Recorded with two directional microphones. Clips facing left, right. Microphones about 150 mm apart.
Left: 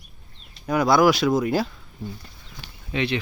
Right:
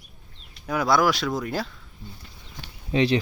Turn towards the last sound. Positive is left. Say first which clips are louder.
# right 4 dB
turn(degrees=-35)  # may be behind; listen again after turning